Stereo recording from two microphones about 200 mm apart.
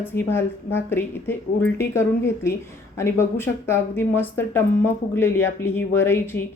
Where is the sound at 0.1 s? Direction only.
10° left (ahead or behind).